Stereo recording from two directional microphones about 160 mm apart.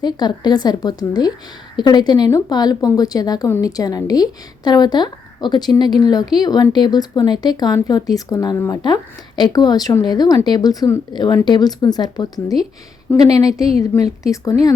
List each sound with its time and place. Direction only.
0.0 s speech: 25° left (ahead or behind)
13.5 s a woman's voice: 5° right (ahead or behind)
13.9 s speech: 15° left (ahead or behind)
14.5 s speech: 45° right (ahead or behind)